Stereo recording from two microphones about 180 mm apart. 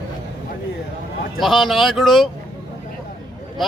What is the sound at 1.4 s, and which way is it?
Speech, centre (ahead or behind).